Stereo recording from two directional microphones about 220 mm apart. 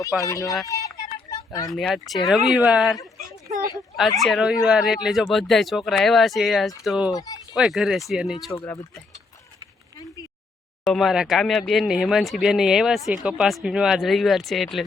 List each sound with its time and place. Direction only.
0.2 s speech: 15° left (ahead or behind)
0.7 s a sound: 15° left (ahead or behind)
1.7 s speech: centre (ahead or behind)
7.1 s speech: 15° left (ahead or behind)
7.5 s speech: centre (ahead or behind)
8.6 s speech: 15° left (ahead or behind)
10.8 s speech: centre (ahead or behind)